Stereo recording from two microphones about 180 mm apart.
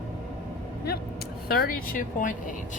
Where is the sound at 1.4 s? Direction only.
55° left (ahead or behind).